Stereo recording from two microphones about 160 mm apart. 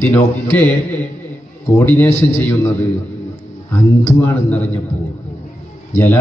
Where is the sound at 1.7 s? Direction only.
15° left (ahead or behind).